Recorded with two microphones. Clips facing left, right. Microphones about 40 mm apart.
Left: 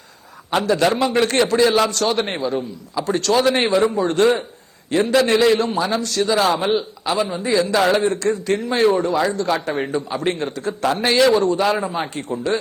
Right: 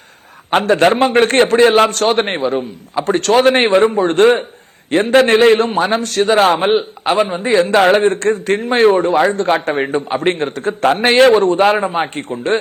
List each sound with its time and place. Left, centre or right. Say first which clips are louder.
0.5 s a man's voice: right 6 dB; right